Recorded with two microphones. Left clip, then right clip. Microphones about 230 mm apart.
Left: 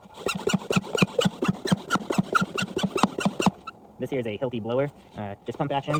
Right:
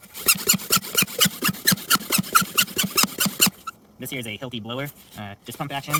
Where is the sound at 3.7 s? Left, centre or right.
Right.